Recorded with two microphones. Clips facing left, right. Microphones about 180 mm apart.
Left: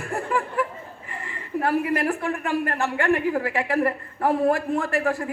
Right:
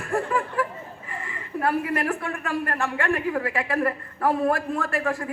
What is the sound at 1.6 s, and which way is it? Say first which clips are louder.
A woman's voice: left 2 dB; 25° left (ahead or behind).